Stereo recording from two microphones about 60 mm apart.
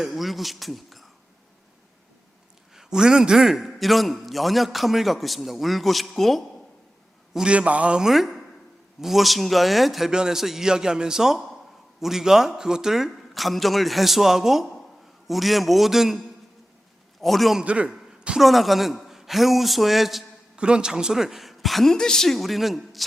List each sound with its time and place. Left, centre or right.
0.0 s a man's voice: centre
2.7 s a man's voice: centre
7.3 s a man's voice: centre
8.0 s a man's voice: centre
17.6 s a man's voice: centre
18.3 s a man's voice: centre
20.6 s a man's voice: centre